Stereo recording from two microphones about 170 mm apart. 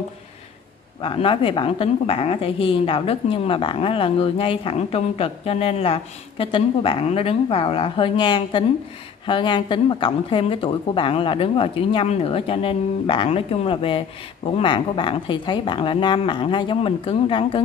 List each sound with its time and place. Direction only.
1.0 s a woman's voice: 30° left (ahead or behind)